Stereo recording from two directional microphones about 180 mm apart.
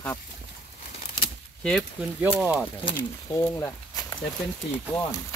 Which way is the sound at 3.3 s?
15° left (ahead or behind).